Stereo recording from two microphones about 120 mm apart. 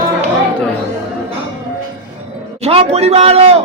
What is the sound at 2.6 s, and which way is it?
Speech, 60° right (ahead or behind).